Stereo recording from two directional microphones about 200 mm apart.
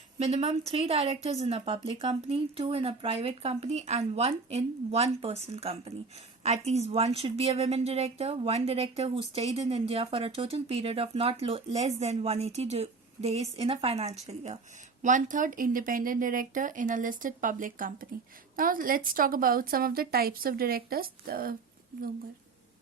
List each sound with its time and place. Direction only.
0.2 s a woman's voice: 30° right (ahead or behind)